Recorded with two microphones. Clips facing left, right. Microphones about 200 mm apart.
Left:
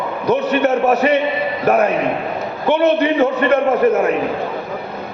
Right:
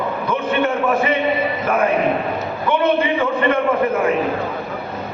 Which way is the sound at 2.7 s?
40° left (ahead or behind).